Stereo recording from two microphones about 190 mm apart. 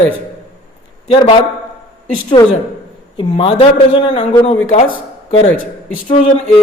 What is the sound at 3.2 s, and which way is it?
Speech, 30° left (ahead or behind).